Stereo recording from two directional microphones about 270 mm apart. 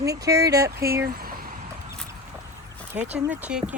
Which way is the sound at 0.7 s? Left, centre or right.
Right.